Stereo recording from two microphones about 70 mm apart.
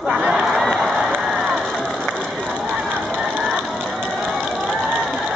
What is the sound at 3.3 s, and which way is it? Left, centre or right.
Ratchet, right.